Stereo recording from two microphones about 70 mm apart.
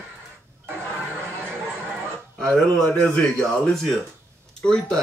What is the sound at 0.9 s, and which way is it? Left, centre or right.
Chatter, right.